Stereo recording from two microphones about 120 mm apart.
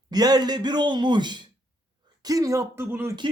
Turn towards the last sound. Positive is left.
turn(degrees=-20)  # may be behind; listen again after turning